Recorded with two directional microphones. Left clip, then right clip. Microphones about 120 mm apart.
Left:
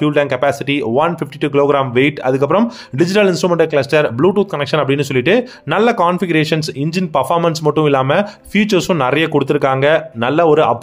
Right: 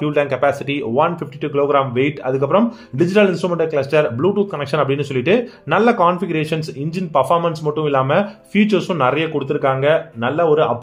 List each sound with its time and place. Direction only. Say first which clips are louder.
0.0 s speech: left 2 dB; 25° left (ahead or behind)
9.3 s speech: left 4 dB; 55° left (ahead or behind)